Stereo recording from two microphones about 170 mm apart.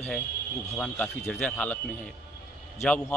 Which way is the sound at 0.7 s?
5° left (ahead or behind).